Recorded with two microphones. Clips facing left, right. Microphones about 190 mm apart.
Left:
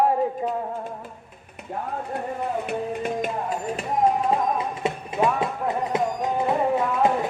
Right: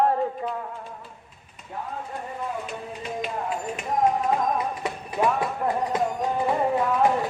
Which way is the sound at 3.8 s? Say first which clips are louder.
Left 1 dB; 30° left (ahead or behind).